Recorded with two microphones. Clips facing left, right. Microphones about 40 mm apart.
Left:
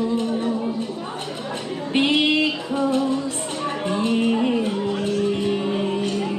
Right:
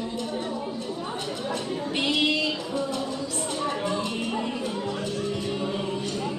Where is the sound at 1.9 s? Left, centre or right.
Left.